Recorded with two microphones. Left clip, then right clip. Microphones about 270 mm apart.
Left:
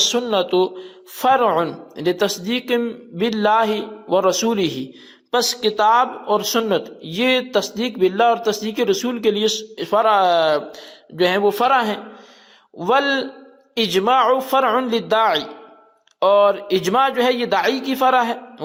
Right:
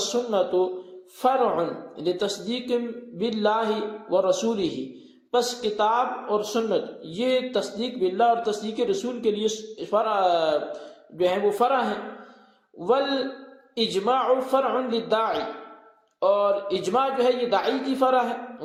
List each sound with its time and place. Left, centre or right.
0.0 s speech: left